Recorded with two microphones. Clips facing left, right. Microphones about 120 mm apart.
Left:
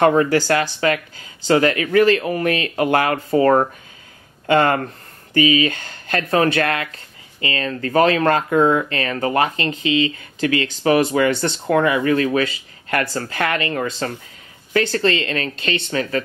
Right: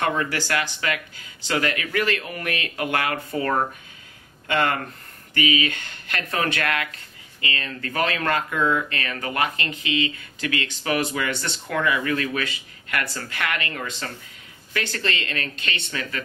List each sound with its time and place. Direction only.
0.0 s speech: 35° left (ahead or behind)
4.5 s speech: 35° left (ahead or behind)